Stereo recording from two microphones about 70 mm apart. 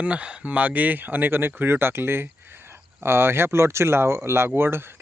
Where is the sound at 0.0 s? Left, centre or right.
Centre.